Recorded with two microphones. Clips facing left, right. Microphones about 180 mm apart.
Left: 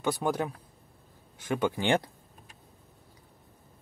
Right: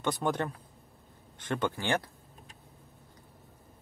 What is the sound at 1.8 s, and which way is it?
Speech, 20° left (ahead or behind).